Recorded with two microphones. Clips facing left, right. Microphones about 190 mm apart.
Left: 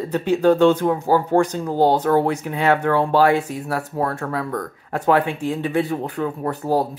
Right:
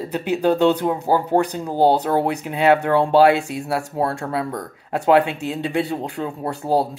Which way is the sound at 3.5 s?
80° right.